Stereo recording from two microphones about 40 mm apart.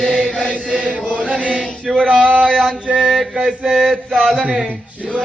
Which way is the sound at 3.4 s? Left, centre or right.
Right.